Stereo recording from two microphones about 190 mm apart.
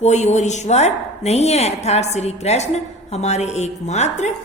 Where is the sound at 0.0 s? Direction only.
35° left (ahead or behind).